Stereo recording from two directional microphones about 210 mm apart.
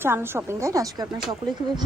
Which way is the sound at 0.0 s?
10° right (ahead or behind).